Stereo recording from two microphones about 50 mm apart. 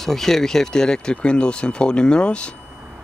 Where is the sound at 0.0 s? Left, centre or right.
Centre.